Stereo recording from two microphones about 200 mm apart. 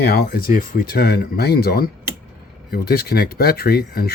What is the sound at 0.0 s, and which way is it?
Speech, 50° left (ahead or behind).